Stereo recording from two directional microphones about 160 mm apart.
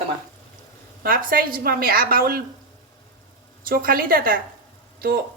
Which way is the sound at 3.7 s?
65° right (ahead or behind).